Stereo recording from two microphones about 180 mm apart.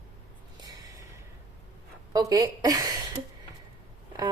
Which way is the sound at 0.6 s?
20° right (ahead or behind).